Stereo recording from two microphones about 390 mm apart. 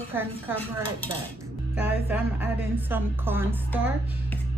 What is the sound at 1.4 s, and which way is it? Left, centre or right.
Speech, centre.